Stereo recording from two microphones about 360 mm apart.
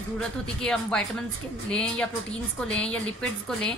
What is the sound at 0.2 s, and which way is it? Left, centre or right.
A woman's voice, centre.